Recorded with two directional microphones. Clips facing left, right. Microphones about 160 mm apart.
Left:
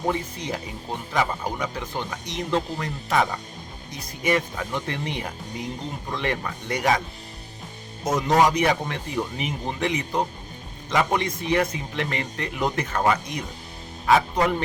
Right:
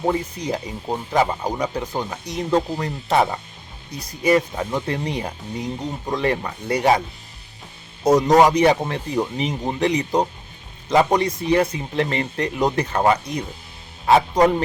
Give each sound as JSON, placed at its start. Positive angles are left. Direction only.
{"t": 0.0, "sound": "speech", "side_deg": -35}
{"t": 8.0, "sound": "speech", "side_deg": -35}